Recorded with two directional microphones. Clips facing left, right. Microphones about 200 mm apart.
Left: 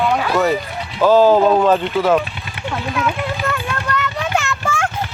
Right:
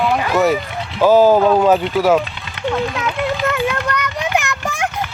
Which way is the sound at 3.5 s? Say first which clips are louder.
Right 3 dB; 15° right (ahead or behind).